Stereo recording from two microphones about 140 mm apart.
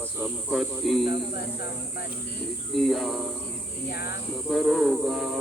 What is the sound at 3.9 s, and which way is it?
Speech, 90° left.